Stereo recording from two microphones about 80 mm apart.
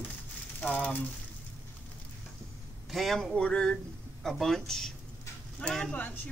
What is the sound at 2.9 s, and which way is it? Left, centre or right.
Speech, centre.